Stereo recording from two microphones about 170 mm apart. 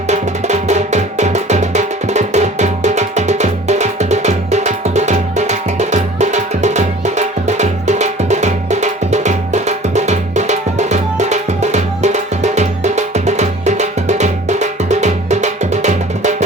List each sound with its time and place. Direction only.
0.1 s music: 40° right (ahead or behind)